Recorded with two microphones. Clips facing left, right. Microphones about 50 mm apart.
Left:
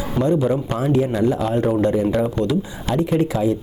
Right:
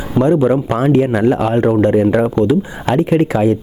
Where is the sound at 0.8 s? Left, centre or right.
Right.